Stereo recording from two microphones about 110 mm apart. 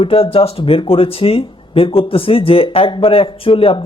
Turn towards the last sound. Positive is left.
turn(degrees=55)  # may be behind; listen again after turning